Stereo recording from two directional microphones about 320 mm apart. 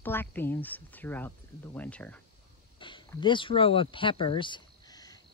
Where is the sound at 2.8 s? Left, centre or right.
Centre.